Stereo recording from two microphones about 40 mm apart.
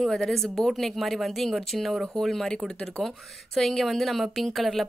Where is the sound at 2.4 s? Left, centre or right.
Centre.